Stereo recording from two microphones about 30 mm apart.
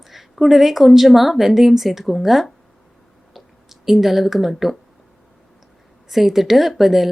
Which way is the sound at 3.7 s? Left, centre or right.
Centre.